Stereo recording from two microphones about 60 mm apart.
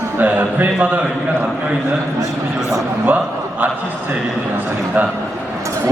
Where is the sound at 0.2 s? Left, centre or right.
Right.